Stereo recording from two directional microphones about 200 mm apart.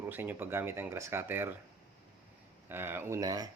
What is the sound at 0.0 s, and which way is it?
Speech, 10° right (ahead or behind).